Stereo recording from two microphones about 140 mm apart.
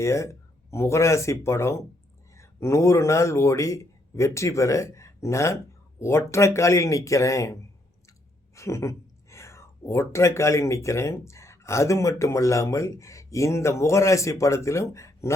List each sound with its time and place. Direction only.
0.0 s speech: 20° left (ahead or behind)